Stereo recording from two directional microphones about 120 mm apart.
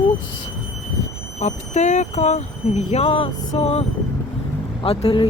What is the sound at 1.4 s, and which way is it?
Speech, 85° left.